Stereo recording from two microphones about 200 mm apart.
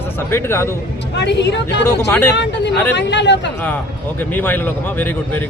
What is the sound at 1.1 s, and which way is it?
Speech, 60° left (ahead or behind).